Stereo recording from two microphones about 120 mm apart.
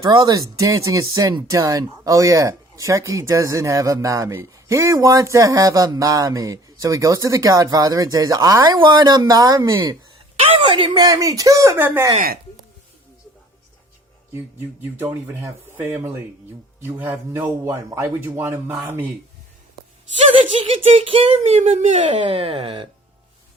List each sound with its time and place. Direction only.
0.0 s speech: 35° right (ahead or behind)
10.6 s speech: 45° right (ahead or behind); by 12.0 s 20° right (ahead or behind)
14.9 s speech: 20° right (ahead or behind)
20.3 s speech: 50° right (ahead or behind); by 21.9 s 90° right
21.9 s speech: 50° right (ahead or behind)